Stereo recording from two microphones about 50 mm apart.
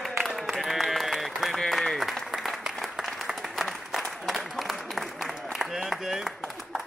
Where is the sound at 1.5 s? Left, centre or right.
Centre.